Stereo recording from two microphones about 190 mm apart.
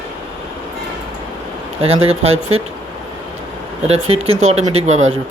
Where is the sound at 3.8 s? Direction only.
35° right (ahead or behind).